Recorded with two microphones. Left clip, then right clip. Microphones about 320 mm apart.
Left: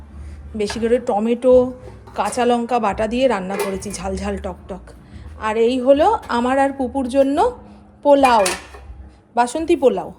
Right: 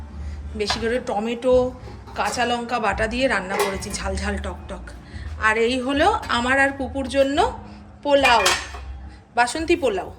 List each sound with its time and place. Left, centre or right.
0.5 s a woman's voice: centre